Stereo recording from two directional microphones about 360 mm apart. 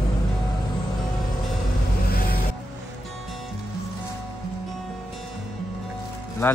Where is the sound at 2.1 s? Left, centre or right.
Left.